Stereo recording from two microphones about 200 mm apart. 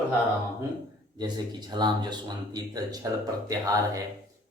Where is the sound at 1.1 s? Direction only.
20° right (ahead or behind).